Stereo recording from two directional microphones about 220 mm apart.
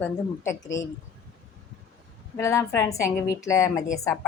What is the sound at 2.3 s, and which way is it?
A woman's voice, 15° left (ahead or behind).